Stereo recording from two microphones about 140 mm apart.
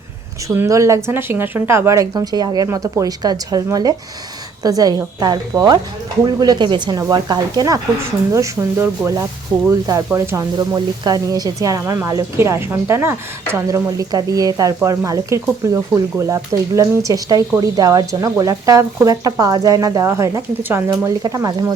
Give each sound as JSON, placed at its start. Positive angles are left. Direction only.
{"t": 0.4, "sound": "a woman's voice", "side_deg": -20}